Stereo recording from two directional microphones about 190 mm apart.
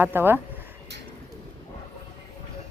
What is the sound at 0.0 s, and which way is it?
Speech, 10° right (ahead or behind).